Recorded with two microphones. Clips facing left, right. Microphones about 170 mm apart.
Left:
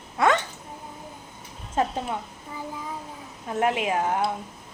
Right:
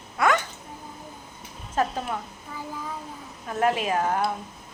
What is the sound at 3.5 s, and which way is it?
Speech, 20° left (ahead or behind).